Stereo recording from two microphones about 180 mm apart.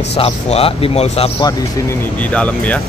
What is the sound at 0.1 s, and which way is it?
A man's voice, 35° left (ahead or behind).